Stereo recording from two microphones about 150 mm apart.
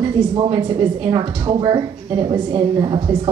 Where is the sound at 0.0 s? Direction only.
30° right (ahead or behind).